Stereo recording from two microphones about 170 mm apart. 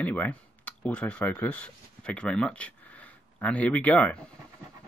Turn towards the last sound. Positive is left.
turn(degrees=10)  # may be behind; listen again after turning